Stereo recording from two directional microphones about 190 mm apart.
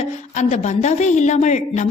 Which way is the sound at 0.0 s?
35° left (ahead or behind).